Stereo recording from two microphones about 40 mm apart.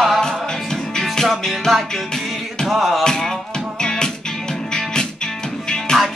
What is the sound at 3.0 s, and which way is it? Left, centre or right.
Music, centre.